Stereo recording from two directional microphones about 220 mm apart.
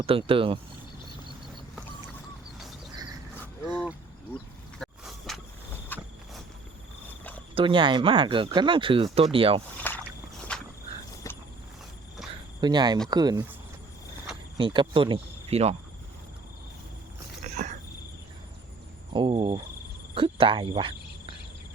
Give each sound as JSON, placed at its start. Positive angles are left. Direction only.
{"t": 0.0, "sound": "speech", "side_deg": -25}
{"t": 4.8, "sound": "a sound", "side_deg": 0}
{"t": 5.9, "sound": "walk", "side_deg": 10}
{"t": 7.5, "sound": "speech", "side_deg": -25}
{"t": 9.8, "sound": "rowboat", "side_deg": 5}
{"t": 10.5, "sound": "a sound", "side_deg": 5}
{"t": 12.5, "sound": "speech", "side_deg": -20}
{"t": 14.6, "sound": "speech", "side_deg": -20}
{"t": 17.5, "sound": "a sound", "side_deg": -30}
{"t": 19.1, "sound": "speech", "side_deg": -20}